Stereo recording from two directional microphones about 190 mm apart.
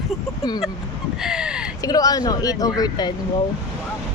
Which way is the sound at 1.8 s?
20° left (ahead or behind).